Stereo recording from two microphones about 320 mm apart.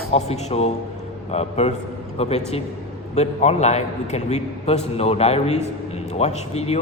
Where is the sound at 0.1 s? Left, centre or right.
Centre.